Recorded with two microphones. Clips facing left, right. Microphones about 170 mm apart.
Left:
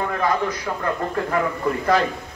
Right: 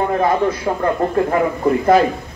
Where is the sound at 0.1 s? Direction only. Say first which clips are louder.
Right 6 dB; 25° right (ahead or behind).